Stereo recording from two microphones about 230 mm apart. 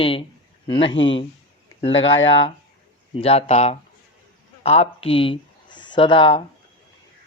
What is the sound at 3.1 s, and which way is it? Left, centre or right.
A woman's voice, left.